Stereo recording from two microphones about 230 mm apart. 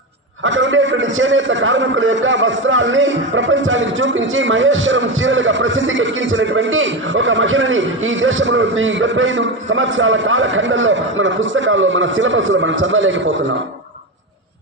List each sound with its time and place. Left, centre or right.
0.4 s a man's voice: right